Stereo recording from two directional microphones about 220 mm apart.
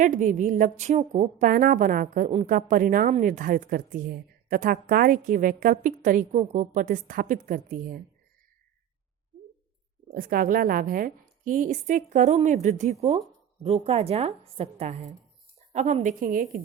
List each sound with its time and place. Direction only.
0.0 s a woman's voice: 35° right (ahead or behind)
10.1 s a woman's voice: 40° right (ahead or behind)